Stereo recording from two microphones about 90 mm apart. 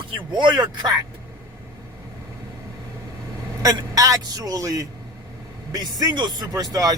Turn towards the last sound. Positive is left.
turn(degrees=-45)  # may be behind; listen again after turning